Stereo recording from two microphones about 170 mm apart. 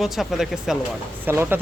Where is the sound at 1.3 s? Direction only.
10° right (ahead or behind).